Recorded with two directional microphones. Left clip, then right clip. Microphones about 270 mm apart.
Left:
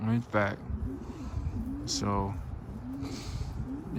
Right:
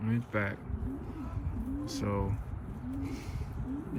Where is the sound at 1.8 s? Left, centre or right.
Centre.